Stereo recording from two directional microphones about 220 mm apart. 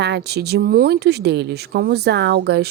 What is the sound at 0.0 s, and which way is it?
Speech, 50° right (ahead or behind).